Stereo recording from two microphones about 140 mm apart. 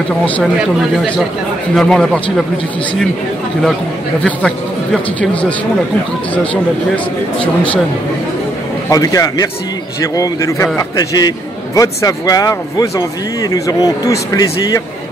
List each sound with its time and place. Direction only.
1.8 s a man's voice: 5° left (ahead or behind)
4.2 s a man's voice: 5° left (ahead or behind)
8.8 s a man's voice: 25° left (ahead or behind)